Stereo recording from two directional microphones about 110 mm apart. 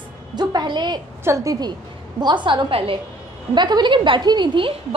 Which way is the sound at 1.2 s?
25° right (ahead or behind).